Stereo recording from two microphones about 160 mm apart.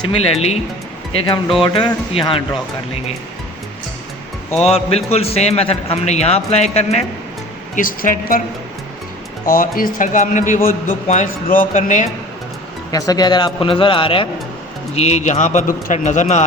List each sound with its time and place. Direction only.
0.0 s a man's voice: 35° left (ahead or behind)
1.6 s a man's voice: 30° left (ahead or behind)
4.6 s a man's voice: 40° left (ahead or behind)
7.8 s a man's voice: 60° left (ahead or behind)
9.5 s a man's voice: 60° left (ahead or behind)
12.9 s a man's voice: 20° left (ahead or behind); by 16.4 s 45° left (ahead or behind)